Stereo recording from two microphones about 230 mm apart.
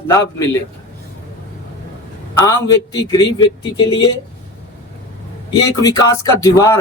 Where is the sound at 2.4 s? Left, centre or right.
Centre.